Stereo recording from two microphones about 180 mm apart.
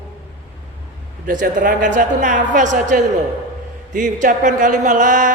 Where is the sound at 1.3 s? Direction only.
45° right (ahead or behind).